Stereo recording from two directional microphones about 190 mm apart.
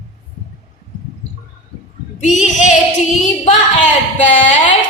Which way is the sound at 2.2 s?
40° left (ahead or behind).